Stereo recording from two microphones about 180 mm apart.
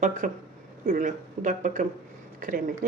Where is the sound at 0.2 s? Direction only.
50° right (ahead or behind).